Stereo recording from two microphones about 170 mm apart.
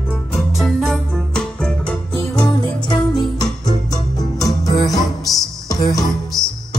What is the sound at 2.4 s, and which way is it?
Music, 25° left (ahead or behind).